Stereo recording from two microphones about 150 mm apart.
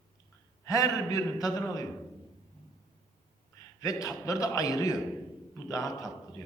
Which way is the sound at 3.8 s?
25° left (ahead or behind).